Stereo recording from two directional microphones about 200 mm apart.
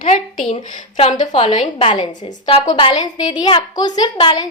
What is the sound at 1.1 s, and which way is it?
A woman's voice, 30° left (ahead or behind).